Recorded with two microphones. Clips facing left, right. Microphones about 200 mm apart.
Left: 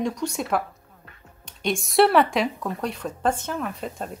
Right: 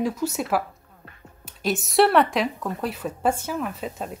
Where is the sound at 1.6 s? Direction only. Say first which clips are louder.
Even; centre (ahead or behind).